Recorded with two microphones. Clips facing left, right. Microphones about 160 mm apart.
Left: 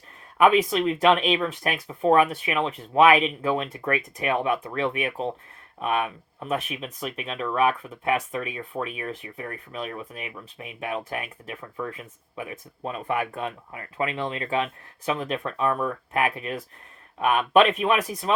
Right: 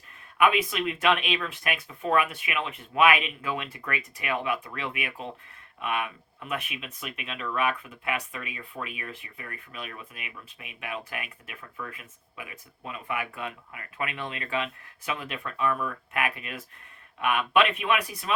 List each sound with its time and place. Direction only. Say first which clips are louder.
0.3 s speech: left 5 dB; 35° left (ahead or behind)